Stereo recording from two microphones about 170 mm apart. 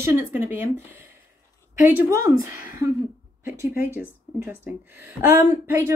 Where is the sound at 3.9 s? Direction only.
10° right (ahead or behind).